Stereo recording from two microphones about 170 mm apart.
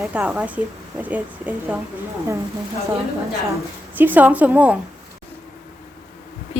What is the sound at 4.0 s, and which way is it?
Speech, 10° right (ahead or behind).